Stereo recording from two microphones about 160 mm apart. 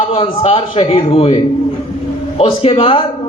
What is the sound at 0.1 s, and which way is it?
A man's voice, 35° left (ahead or behind).